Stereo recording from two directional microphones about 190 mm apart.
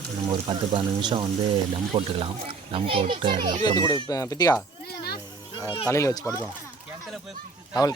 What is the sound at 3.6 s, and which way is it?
Speech, 20° left (ahead or behind).